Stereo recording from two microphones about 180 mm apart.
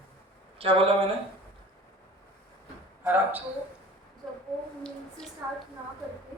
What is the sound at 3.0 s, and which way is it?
Speech, 10° right (ahead or behind).